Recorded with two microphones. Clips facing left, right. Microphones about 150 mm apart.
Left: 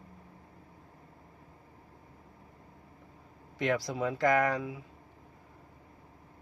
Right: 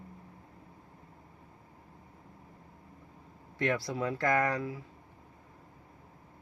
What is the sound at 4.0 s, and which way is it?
Speech, centre (ahead or behind).